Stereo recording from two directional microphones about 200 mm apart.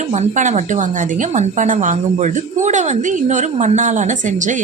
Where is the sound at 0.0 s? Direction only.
35° right (ahead or behind).